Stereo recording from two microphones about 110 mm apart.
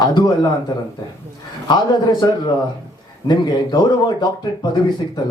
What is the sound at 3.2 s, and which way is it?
A man's voice, 40° left (ahead or behind).